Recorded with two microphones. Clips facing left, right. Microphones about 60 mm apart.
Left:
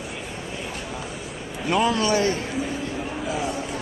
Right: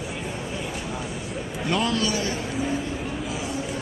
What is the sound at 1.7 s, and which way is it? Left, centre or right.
Speech, centre.